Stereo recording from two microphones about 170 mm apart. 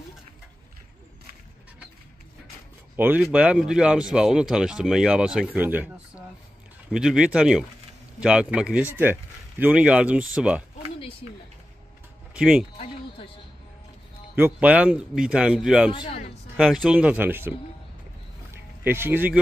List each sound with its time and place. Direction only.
3.0 s speech: 10° right (ahead or behind)
12.4 s speech: 5° right (ahead or behind)
12.7 s a sound: 35° left (ahead or behind)
14.3 s speech: 10° right (ahead or behind)
15.9 s a man's voice: 35° left (ahead or behind)
16.5 s speech: centre (ahead or behind)
18.5 s music: 15° right (ahead or behind)